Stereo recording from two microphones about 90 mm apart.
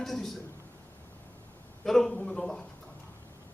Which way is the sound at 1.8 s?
5° left (ahead or behind).